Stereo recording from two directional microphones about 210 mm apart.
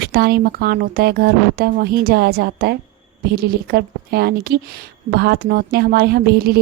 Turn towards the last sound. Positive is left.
turn(degrees=-50)  # may be behind; listen again after turning